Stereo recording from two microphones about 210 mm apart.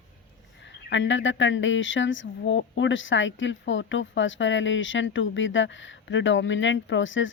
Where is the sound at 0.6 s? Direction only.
60° left (ahead or behind).